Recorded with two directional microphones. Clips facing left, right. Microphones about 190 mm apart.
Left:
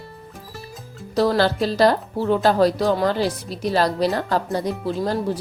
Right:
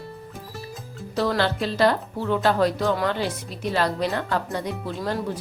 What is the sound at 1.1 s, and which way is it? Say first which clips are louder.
Speech: left 5 dB; 35° left (ahead or behind).